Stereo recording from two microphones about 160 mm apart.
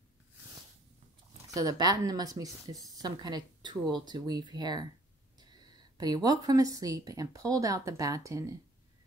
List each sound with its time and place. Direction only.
1.5 s a woman's voice: 25° right (ahead or behind)